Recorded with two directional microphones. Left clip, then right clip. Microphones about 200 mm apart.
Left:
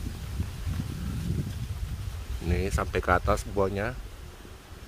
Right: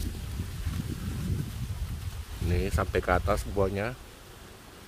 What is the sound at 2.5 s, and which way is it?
Speech, 20° left (ahead or behind).